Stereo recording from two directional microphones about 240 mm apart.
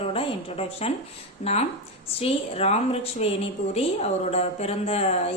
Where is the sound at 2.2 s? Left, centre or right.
Left.